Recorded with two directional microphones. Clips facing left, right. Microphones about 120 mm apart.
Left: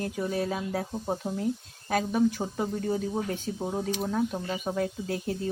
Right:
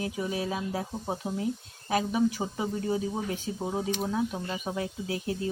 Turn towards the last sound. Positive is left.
turn(degrees=-5)  # may be behind; listen again after turning